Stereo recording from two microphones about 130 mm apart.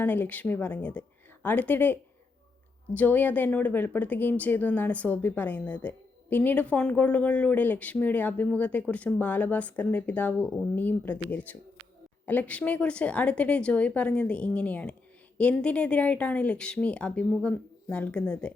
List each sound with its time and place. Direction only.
0.0 s speech: 15° left (ahead or behind)